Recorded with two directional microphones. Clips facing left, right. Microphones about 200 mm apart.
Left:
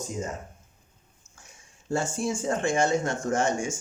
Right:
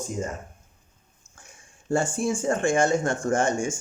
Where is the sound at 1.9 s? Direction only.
50° right (ahead or behind).